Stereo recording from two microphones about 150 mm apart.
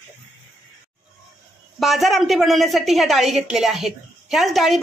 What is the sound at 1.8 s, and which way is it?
A woman's voice, centre (ahead or behind).